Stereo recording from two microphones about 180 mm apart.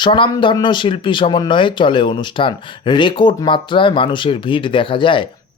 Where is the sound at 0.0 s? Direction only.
25° left (ahead or behind).